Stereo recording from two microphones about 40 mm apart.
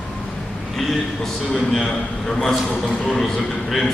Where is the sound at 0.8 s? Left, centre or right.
Centre.